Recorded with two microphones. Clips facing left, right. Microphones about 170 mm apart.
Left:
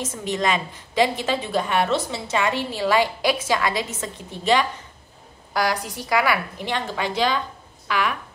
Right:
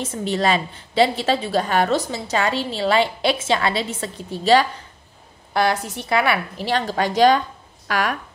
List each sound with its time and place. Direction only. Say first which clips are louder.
0.0 s a woman's voice: right 3 dB; 30° right (ahead or behind)